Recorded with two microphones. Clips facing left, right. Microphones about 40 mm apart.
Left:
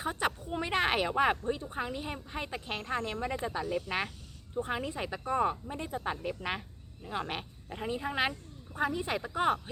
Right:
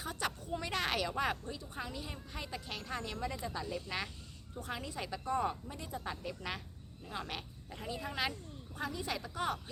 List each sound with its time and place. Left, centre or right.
0.0 s speech: left